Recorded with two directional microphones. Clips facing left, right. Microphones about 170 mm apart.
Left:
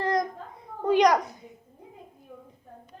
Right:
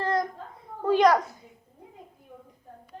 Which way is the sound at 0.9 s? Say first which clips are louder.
Even; 15° left (ahead or behind).